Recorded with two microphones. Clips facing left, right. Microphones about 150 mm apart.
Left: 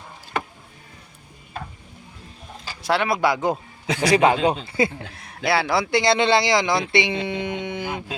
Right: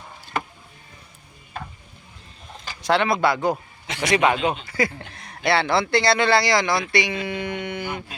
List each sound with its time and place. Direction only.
2.8 s speech: 5° left (ahead or behind)
4.0 s speech: 35° left (ahead or behind)
4.9 s speech: 5° left (ahead or behind); by 8.0 s 20° left (ahead or behind)